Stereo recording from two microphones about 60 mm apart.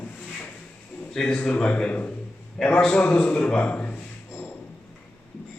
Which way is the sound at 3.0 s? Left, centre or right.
Left.